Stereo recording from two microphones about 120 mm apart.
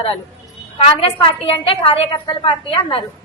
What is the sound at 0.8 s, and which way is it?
A woman's voice, 50° left (ahead or behind).